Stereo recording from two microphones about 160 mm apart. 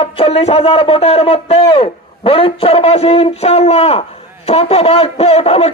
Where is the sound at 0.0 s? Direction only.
35° left (ahead or behind).